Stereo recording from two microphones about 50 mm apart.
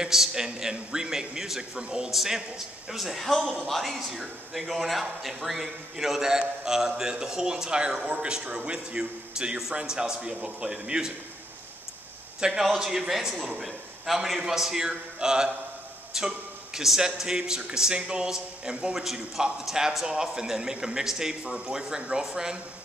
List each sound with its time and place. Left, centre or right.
0.0 s a man's voice: centre
12.4 s a man's voice: centre